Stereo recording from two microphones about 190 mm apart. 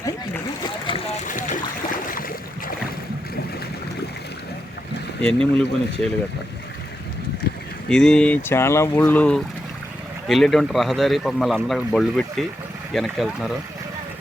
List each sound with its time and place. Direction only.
0.0 s boat: 20° left (ahead or behind)
1.3 s a sound: 45° left (ahead or behind)
2.0 s boat: 45° left (ahead or behind)
5.2 s speech: 5° left (ahead or behind)
7.9 s speech: 5° left (ahead or behind)